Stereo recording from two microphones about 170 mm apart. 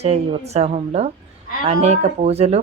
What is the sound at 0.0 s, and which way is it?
Speech, 40° right (ahead or behind).